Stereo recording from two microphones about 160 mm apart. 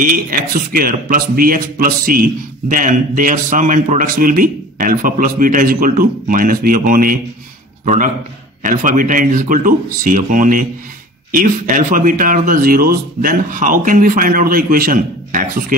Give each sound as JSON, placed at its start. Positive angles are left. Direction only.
{"t": 0.0, "sound": "speech", "side_deg": -60}